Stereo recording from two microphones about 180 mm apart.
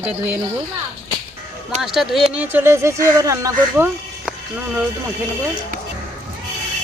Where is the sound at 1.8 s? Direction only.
Centre (ahead or behind).